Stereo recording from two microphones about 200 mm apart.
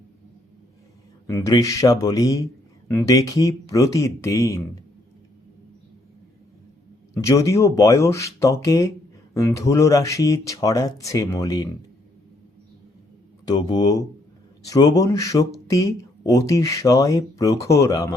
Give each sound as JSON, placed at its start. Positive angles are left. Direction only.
{"t": 1.3, "sound": "a man's voice", "side_deg": 15}
{"t": 7.1, "sound": "a man's voice", "side_deg": 15}
{"t": 13.6, "sound": "a man's voice", "side_deg": 20}